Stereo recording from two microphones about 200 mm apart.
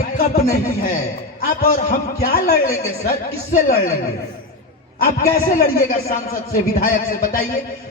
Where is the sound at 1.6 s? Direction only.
45° left (ahead or behind).